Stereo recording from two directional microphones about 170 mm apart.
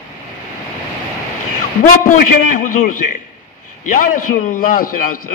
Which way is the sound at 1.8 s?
50° left (ahead or behind).